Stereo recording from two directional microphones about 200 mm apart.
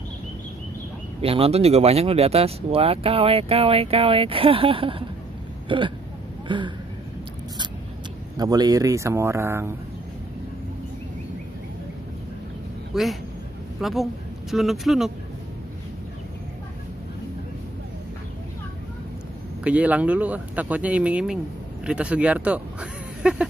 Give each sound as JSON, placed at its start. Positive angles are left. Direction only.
{"t": 1.2, "sound": "speech", "side_deg": -30}
{"t": 8.4, "sound": "speech", "side_deg": -20}
{"t": 12.9, "sound": "speech", "side_deg": 0}
{"t": 19.6, "sound": "speech", "side_deg": -5}